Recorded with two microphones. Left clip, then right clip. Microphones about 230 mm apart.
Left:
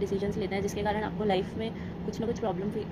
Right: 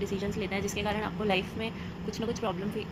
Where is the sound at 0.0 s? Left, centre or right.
Right.